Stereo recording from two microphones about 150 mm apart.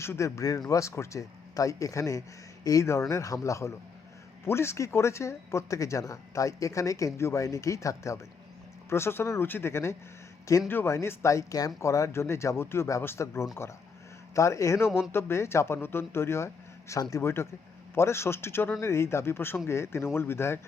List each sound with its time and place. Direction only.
0.0 s speech: 20° left (ahead or behind)